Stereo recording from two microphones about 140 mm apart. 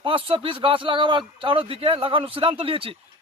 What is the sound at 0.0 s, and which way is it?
A man's voice, 40° right (ahead or behind).